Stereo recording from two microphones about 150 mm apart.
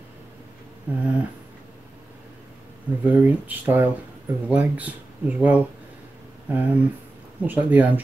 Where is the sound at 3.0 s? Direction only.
10° right (ahead or behind).